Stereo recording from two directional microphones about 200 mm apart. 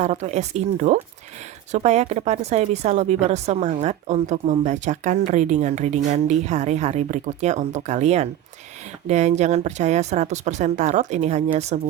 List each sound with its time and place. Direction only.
0.0 s speech: 35° right (ahead or behind)